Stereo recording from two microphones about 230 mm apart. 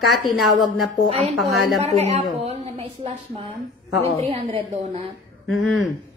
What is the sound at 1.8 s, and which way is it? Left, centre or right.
A woman's voice, right.